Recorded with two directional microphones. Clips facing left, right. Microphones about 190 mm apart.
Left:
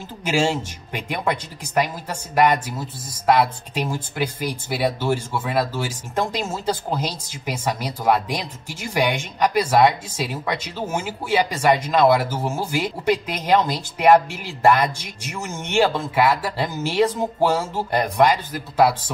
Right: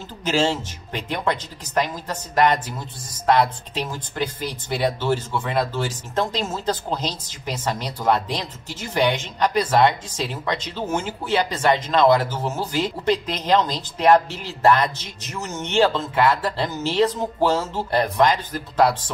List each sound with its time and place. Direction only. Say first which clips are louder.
0.2 s speech: even; 10° left (ahead or behind)